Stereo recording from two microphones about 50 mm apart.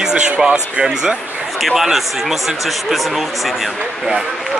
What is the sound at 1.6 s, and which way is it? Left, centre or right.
Speech, centre.